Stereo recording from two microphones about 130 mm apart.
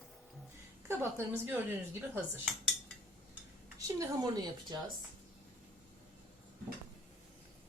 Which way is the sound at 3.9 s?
30° right (ahead or behind).